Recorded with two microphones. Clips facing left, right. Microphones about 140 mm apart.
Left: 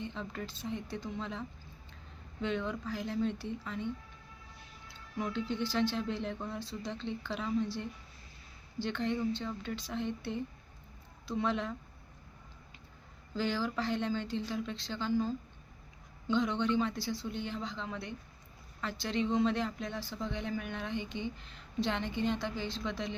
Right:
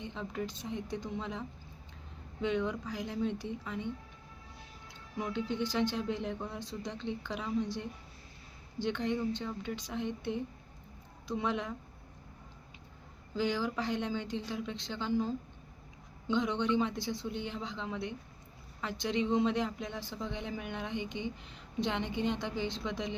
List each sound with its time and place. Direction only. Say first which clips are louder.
0.0 s speech: right 2 dB; 15° right (ahead or behind)
4.9 s speech: left 1 dB; 15° right (ahead or behind)
13.3 s speech: right 1 dB; 15° right (ahead or behind)